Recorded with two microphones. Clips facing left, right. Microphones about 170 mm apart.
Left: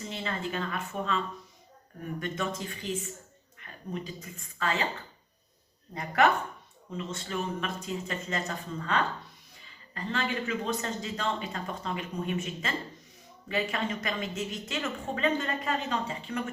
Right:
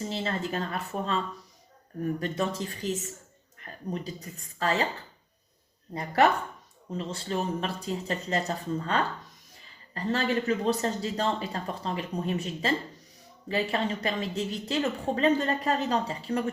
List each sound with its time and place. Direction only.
0.0 s speech: 35° right (ahead or behind)
5.9 s speech: 35° right (ahead or behind)